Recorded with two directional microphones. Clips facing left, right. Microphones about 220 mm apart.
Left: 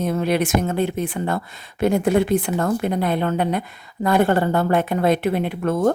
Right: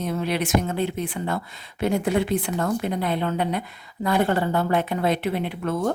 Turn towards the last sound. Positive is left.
turn(degrees=50)  # may be behind; listen again after turning